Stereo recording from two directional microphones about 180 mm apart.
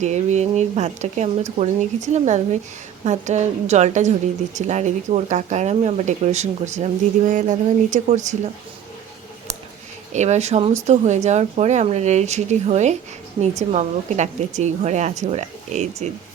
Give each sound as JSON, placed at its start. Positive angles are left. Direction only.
{"t": 0.0, "sound": "a woman's voice", "side_deg": -40}
{"t": 10.1, "sound": "a woman's voice", "side_deg": -40}